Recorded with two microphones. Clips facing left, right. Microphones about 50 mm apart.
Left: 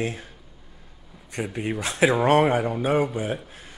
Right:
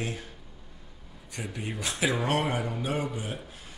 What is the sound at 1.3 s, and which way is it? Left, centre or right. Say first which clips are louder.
A man's voice: left 8 dB; left.